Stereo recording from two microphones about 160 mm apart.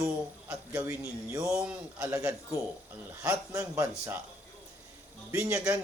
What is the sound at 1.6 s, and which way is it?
Speech, 10° right (ahead or behind).